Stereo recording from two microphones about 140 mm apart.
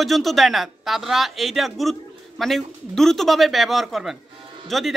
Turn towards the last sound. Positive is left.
turn(degrees=0)  # may be behind; listen again after turning